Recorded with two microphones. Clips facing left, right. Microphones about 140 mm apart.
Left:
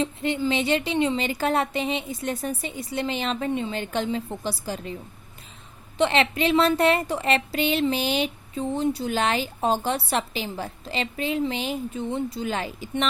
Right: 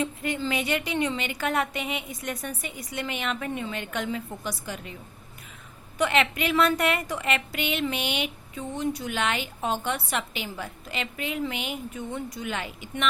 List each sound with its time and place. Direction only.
0.0 s a woman's voice: 25° left (ahead or behind)
6.0 s a woman's voice: 30° left (ahead or behind)